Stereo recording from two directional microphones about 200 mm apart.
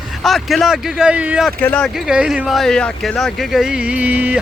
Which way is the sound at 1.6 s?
5° left (ahead or behind).